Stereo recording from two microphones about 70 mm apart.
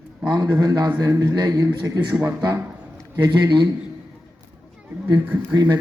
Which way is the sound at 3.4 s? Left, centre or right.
Right.